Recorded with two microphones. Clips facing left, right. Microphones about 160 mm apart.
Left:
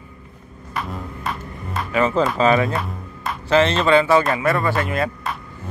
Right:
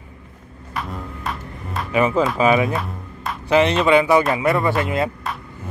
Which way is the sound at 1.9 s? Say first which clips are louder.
Right 1 dB; 15° right (ahead or behind).